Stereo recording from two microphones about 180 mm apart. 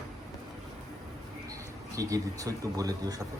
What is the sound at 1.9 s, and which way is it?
Speech, 20° right (ahead or behind).